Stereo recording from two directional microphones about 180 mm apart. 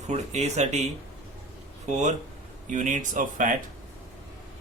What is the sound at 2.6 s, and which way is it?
Speech, 40° right (ahead or behind).